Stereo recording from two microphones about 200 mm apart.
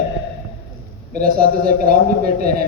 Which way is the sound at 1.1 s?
50° right (ahead or behind).